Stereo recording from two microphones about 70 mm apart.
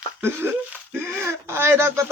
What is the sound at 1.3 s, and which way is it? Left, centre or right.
Speech, right.